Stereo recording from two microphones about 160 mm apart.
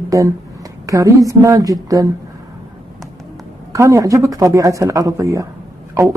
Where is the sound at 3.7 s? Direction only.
20° right (ahead or behind).